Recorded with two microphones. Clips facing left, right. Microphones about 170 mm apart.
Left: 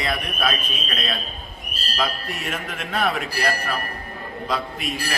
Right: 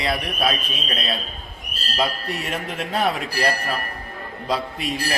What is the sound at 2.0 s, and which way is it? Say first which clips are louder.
A man's voice: right 2 dB; 35° right (ahead or behind).